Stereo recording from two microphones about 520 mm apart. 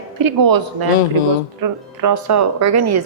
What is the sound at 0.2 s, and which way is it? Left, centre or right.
A woman's voice, right.